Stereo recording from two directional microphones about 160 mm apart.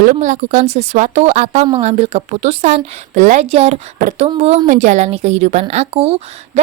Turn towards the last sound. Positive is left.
turn(degrees=-40)  # may be behind; listen again after turning